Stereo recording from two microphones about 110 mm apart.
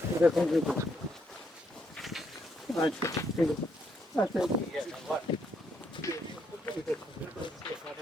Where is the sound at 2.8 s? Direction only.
30° left (ahead or behind).